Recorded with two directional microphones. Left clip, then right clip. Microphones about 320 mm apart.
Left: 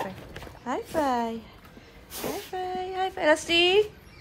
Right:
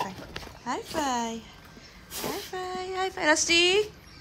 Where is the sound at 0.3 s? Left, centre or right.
Centre.